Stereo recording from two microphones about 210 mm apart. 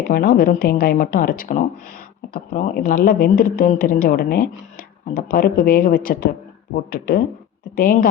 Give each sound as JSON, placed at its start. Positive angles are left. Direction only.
{"t": 0.1, "sound": "a woman's voice", "side_deg": 45}